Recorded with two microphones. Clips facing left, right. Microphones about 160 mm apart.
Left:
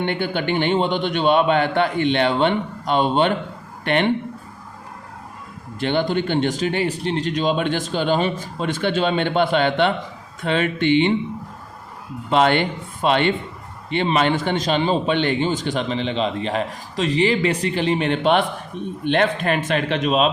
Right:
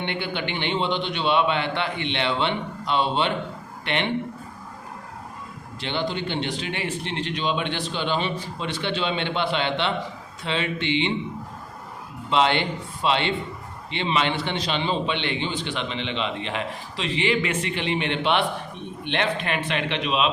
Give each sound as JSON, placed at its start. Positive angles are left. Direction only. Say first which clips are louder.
{"t": 0.0, "sound": "a man's voice", "louder": "left 6 dB", "side_deg": 45}
{"t": 5.8, "sound": "a man's voice", "louder": "left 7 dB", "side_deg": 50}
{"t": 12.3, "sound": "a man's voice", "louder": "left 4 dB", "side_deg": 50}